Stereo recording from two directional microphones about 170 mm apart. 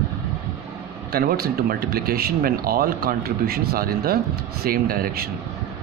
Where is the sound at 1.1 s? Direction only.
65° right (ahead or behind).